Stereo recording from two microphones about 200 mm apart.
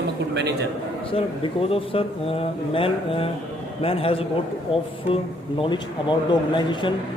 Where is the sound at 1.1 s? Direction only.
30° left (ahead or behind).